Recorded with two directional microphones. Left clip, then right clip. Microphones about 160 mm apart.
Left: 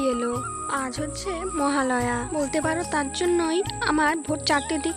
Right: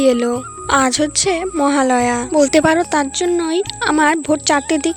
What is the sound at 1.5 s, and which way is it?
Speech, 45° right (ahead or behind).